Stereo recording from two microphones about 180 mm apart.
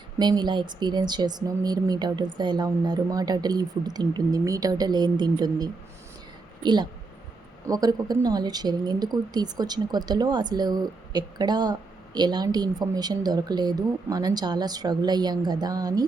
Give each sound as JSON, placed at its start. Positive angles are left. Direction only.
{"t": 0.2, "sound": "a woman's voice", "side_deg": -25}